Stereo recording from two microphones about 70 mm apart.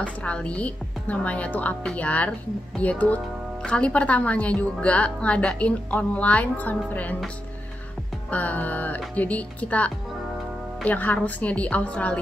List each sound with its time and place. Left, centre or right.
0.0 s a woman's voice: centre
8.3 s a woman's voice: left